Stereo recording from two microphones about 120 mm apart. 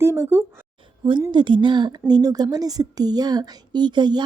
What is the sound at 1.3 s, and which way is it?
A woman's voice, 40° right (ahead or behind).